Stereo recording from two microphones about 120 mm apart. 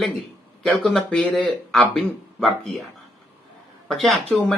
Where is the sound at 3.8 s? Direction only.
Centre (ahead or behind).